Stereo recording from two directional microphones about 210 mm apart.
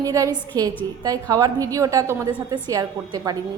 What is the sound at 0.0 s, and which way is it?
A woman's voice, 15° right (ahead or behind).